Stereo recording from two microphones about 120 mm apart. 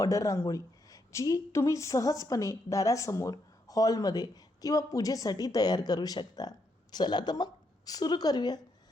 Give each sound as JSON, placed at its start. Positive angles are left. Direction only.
{"t": 0.0, "sound": "a woman's voice", "side_deg": 30}